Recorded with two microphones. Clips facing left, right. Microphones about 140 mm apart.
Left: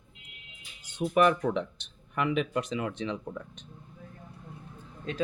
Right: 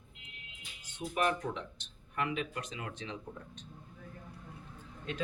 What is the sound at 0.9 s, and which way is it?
Speech, 80° left.